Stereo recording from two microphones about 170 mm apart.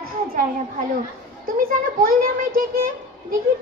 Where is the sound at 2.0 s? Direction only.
55° right (ahead or behind).